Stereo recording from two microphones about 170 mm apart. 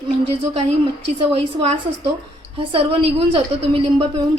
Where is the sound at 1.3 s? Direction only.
35° right (ahead or behind).